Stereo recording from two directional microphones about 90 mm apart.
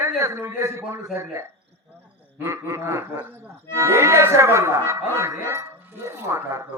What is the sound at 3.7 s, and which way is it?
A man's voice, 30° right (ahead or behind).